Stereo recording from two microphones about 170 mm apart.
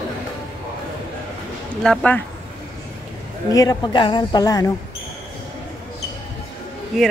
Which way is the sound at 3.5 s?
20° left (ahead or behind).